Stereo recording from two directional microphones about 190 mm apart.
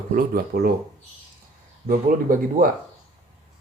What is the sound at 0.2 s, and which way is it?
Speech, 50° right (ahead or behind).